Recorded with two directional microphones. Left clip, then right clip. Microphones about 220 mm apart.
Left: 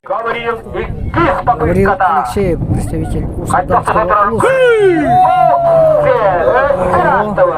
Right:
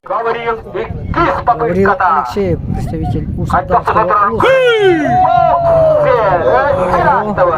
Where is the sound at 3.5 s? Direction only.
20° right (ahead or behind).